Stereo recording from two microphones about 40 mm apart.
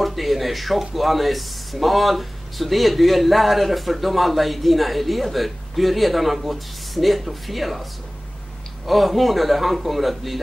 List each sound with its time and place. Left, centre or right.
0.0 s speech: centre
8.8 s speech: centre